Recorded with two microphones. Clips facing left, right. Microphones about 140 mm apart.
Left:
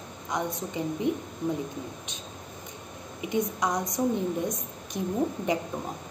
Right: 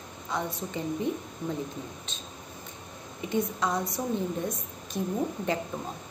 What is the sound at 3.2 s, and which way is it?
Speech, 15° left (ahead or behind).